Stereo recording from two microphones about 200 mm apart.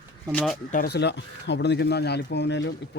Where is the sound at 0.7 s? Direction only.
50° left (ahead or behind).